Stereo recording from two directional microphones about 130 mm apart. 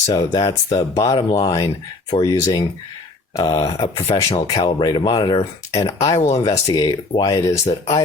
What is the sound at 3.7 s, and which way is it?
Speech, 45° left (ahead or behind).